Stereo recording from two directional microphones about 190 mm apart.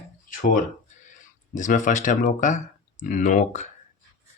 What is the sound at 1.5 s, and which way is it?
Speech, 40° left (ahead or behind).